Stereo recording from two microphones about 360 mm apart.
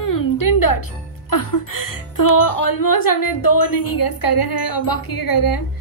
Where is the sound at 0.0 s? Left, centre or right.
Left.